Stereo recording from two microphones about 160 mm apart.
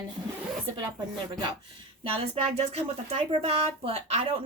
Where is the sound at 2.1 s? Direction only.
40° right (ahead or behind).